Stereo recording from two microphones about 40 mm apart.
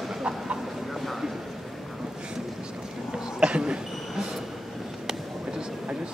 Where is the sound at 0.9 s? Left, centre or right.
Centre.